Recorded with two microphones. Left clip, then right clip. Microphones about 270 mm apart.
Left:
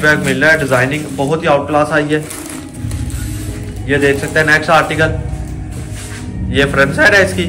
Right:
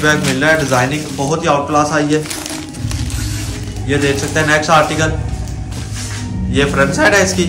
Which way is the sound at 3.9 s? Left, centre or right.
Centre.